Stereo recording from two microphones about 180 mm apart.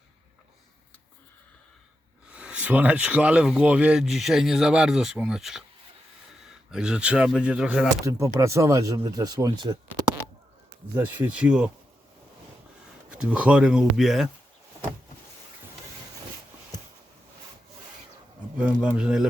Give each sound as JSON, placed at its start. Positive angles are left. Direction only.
{"t": 2.3, "sound": "speech", "side_deg": -5}
{"t": 8.0, "sound": "speech", "side_deg": -15}
{"t": 10.9, "sound": "speech", "side_deg": -10}
{"t": 13.1, "sound": "speech", "side_deg": -5}
{"t": 18.6, "sound": "speech", "side_deg": -5}